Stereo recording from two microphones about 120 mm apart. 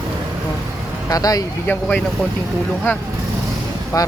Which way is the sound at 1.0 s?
30° left (ahead or behind).